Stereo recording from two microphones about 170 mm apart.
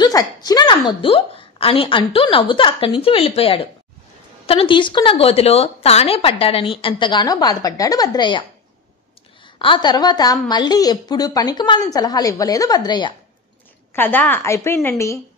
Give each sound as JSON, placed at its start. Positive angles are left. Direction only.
{"t": 0.0, "sound": "a woman's voice", "side_deg": 20}
{"t": 9.6, "sound": "a woman's voice", "side_deg": 30}
{"t": 13.9, "sound": "a woman's voice", "side_deg": 10}